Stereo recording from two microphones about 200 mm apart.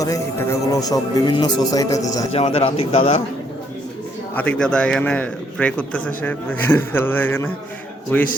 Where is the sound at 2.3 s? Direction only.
30° left (ahead or behind).